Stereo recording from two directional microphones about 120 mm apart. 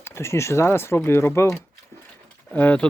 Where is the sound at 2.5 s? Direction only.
10° left (ahead or behind).